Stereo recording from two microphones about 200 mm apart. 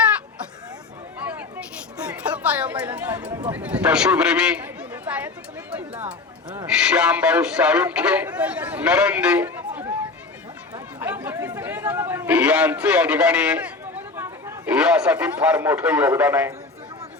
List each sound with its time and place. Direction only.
2.0 s a man's voice: 5° right (ahead or behind)
11.0 s a man's voice: 10° right (ahead or behind)